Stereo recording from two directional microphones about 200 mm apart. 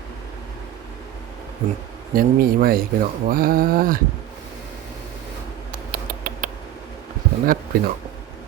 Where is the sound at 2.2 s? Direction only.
45° right (ahead or behind).